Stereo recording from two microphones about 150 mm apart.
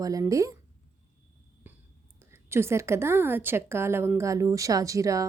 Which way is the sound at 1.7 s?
15° right (ahead or behind).